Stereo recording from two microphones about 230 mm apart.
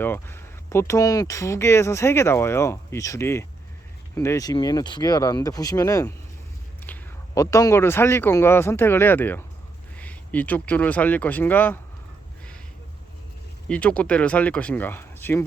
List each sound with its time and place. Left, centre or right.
0.0 s speech: centre
13.7 s speech: centre